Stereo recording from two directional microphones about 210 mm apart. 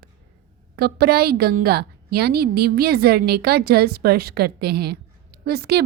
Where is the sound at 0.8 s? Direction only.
50° right (ahead or behind).